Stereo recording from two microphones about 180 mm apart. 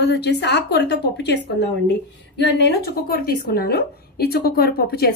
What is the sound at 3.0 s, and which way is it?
A woman's voice, 55° left (ahead or behind).